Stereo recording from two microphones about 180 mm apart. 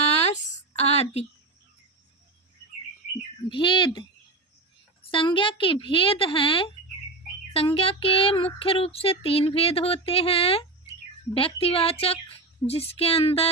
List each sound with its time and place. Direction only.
0.0 s a sound: 35° left (ahead or behind)
3.5 s a woman's voice: 25° left (ahead or behind)
5.1 s a woman's voice: 30° left (ahead or behind)
7.5 s child singing: 30° left (ahead or behind)